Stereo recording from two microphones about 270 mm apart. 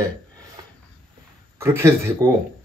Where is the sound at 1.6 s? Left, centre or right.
Centre.